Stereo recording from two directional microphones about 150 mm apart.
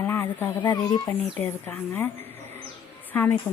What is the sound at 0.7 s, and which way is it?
Speech, 25° left (ahead or behind).